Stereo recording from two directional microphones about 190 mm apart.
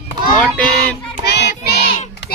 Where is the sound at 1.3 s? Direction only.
65° left (ahead or behind).